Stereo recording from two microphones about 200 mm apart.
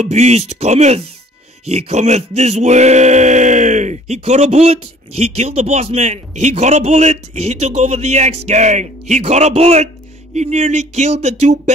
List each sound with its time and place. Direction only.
0.0 s a man's voice: 35° right (ahead or behind)